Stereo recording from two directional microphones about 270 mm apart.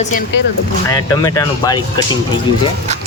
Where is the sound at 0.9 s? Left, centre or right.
Centre.